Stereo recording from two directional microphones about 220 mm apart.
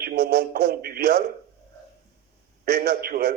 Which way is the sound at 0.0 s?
45° right (ahead or behind).